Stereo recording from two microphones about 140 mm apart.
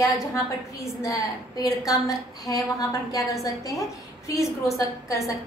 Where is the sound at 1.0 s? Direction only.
25° left (ahead or behind).